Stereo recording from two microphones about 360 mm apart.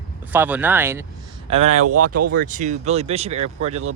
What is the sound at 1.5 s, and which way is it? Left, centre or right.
Speech, centre.